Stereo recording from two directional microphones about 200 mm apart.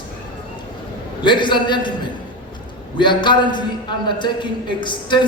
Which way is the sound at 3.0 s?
25° left (ahead or behind).